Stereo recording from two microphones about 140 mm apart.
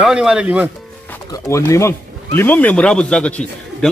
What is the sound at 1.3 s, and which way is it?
Speech, 20° left (ahead or behind).